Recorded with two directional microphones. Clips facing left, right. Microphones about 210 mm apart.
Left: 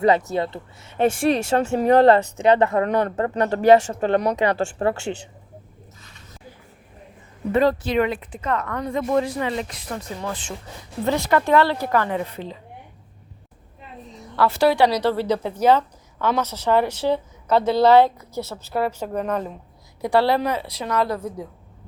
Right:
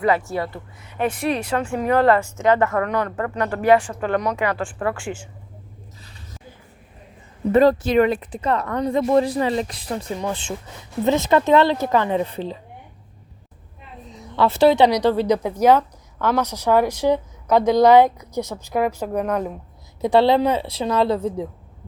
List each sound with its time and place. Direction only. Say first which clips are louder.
0.0 s speech: left 2 dB; 20° left (ahead or behind)
2.3 s speech: left 1 dB; 15° left (ahead or behind)
2.7 s speech: left 2 dB; 30° left (ahead or behind)
7.5 s speech: right 4 dB; 40° right (ahead or behind)
10.2 s a woman's voice: right 4 dB; 20° right (ahead or behind)
14.3 s a woman's voice: right 3 dB; 25° right (ahead or behind)
16.1 s a woman's voice: right 1 dB; centre (ahead or behind)
16.4 s a woman's voice: right 2 dB; 10° right (ahead or behind)
20.0 s a woman's voice: right 3 dB; 20° right (ahead or behind)